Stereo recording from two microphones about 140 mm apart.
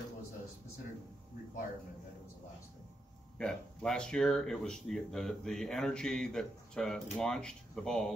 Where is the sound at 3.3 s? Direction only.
5° left (ahead or behind).